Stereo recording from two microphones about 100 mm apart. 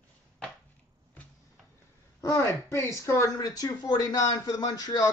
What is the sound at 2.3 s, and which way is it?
Speech, 30° left (ahead or behind).